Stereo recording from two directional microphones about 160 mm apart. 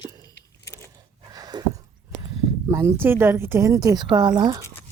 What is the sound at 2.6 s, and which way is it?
Speech, 15° right (ahead or behind).